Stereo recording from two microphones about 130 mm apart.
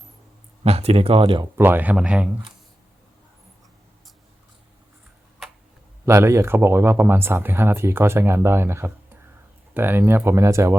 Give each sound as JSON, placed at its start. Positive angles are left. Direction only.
{"t": 0.6, "sound": "speech", "side_deg": -50}
{"t": 1.5, "sound": "speech", "side_deg": -15}
{"t": 6.1, "sound": "speech", "side_deg": -20}